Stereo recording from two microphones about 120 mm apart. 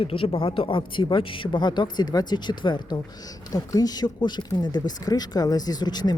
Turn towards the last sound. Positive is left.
turn(degrees=35)  # may be behind; listen again after turning